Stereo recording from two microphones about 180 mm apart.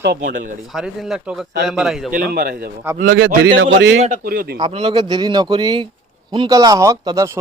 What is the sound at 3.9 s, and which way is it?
Speech, 40° right (ahead or behind).